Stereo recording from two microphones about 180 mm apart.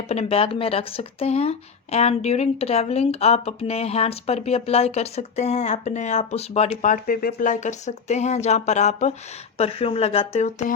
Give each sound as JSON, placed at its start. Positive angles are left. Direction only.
{"t": 0.1, "sound": "speech", "side_deg": 35}